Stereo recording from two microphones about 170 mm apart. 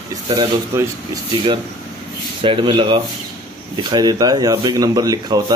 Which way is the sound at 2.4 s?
30° right (ahead or behind).